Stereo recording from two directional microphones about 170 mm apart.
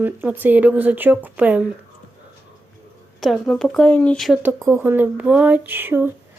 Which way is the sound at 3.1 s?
Centre (ahead or behind).